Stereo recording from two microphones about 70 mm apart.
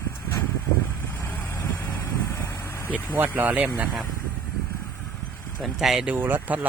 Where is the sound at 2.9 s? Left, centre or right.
Right.